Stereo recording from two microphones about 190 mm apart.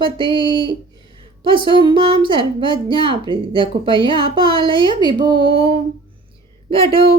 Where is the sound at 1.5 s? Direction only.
25° right (ahead or behind).